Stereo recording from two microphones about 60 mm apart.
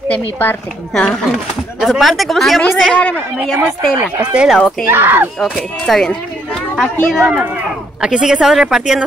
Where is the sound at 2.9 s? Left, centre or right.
Left.